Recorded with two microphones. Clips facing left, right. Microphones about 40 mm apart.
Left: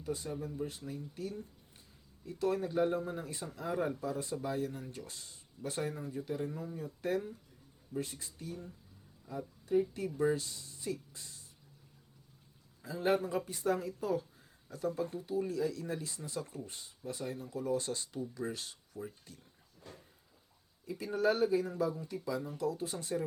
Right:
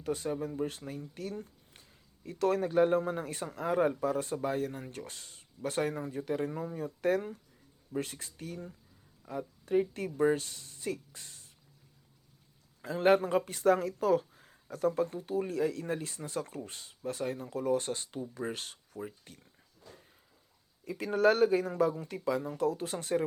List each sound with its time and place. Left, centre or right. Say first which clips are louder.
0.0 s speech: right 5 dB; right
12.8 s speech: right 6 dB; right
19.9 s a sound: left 1 dB; left
20.8 s speech: right 5 dB; right